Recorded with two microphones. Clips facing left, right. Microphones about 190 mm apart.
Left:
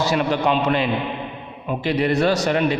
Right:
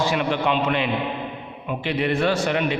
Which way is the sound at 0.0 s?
40° left (ahead or behind).